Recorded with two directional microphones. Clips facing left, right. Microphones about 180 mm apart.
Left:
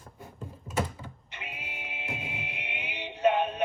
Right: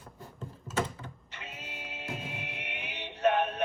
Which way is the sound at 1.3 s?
15° left (ahead or behind).